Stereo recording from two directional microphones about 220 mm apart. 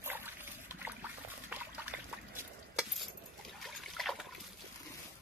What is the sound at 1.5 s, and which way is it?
Liquid, 5° right (ahead or behind).